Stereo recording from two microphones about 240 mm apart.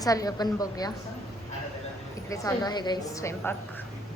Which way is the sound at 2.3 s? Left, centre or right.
Centre.